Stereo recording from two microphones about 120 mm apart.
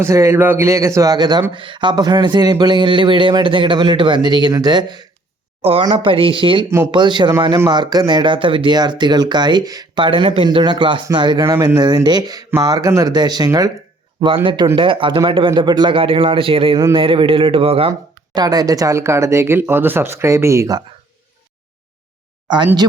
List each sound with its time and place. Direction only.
0.0 s a man's voice: 25° right (ahead or behind); by 6.7 s 45° right (ahead or behind)
6.7 s speech: 25° right (ahead or behind)
6.9 s a man's voice: 40° right (ahead or behind)
14.4 s a man's voice: 40° right (ahead or behind)
18.3 s speech: 30° right (ahead or behind)
22.4 s speech: 40° right (ahead or behind)